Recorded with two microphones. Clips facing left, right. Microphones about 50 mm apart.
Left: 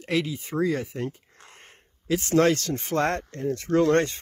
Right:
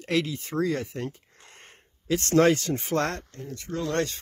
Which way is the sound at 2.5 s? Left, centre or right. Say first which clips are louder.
Right 1 dB; centre.